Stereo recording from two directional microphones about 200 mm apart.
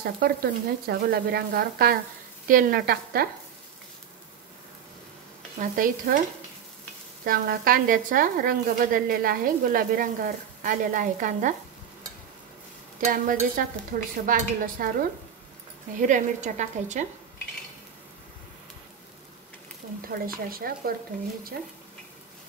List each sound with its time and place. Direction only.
0.0 s a woman's voice: 50° right (ahead or behind)
5.6 s a woman's voice: 45° right (ahead or behind)
7.2 s a woman's voice: 45° right (ahead or behind)
13.0 s a woman's voice: 40° right (ahead or behind)
16.1 s a woman's voice: 40° right (ahead or behind)
20.1 s a woman's voice: 45° right (ahead or behind)